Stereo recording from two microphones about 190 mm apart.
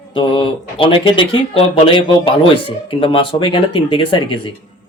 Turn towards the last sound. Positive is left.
turn(degrees=25)  # may be behind; listen again after turning